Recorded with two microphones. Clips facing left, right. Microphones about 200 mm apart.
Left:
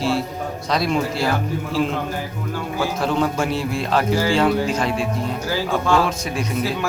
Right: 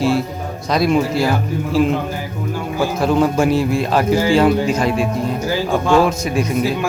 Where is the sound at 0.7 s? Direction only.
10° right (ahead or behind).